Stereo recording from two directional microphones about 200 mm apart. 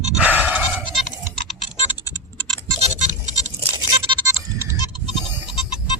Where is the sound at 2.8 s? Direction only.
35° right (ahead or behind).